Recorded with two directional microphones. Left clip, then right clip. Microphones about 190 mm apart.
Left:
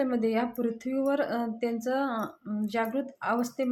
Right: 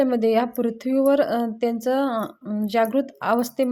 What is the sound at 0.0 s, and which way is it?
Speech, 35° right (ahead or behind).